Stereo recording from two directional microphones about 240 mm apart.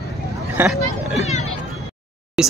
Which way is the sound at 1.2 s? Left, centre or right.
Left.